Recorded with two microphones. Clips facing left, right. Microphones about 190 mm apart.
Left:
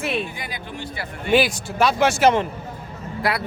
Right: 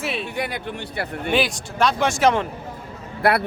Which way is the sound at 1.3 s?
5° left (ahead or behind).